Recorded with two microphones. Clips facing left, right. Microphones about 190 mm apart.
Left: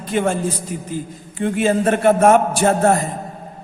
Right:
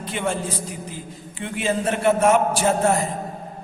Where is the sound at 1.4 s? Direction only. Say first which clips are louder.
Left 7 dB; 45° left (ahead or behind).